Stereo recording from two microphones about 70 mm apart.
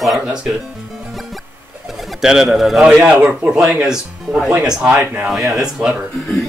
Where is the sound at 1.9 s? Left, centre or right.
Centre.